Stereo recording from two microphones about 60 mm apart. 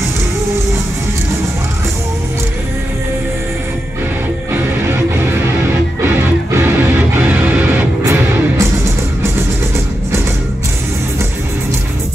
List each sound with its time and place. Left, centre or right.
7.2 s music: right
8.0 s music: right